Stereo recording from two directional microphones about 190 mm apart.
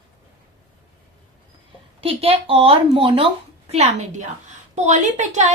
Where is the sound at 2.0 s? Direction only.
30° right (ahead or behind).